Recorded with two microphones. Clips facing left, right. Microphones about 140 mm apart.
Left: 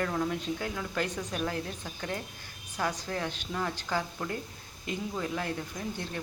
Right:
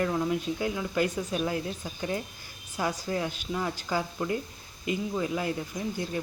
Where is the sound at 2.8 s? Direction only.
10° right (ahead or behind).